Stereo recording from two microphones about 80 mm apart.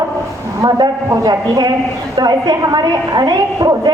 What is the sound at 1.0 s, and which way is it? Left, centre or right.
A man's voice, right.